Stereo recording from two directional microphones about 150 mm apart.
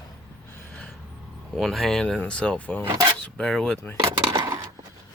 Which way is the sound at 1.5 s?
Centre (ahead or behind).